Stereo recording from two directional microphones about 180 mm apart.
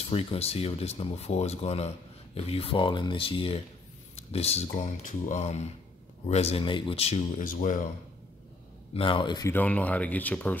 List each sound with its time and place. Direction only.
0.0 s speech: 30° left (ahead or behind)
8.9 s speech: 30° left (ahead or behind)
9.5 s speech: 10° left (ahead or behind)